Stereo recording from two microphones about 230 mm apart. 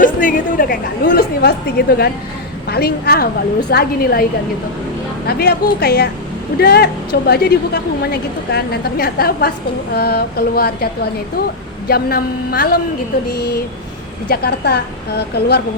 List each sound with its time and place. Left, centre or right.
0.0 s a woman's voice: left